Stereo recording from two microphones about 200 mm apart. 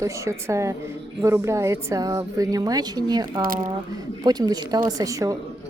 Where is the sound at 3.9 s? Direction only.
20° right (ahead or behind).